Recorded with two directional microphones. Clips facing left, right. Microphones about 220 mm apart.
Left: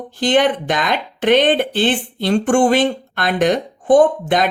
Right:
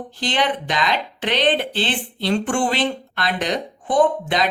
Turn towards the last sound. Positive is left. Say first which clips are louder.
# left 4 dB
turn(degrees=50)  # may be behind; listen again after turning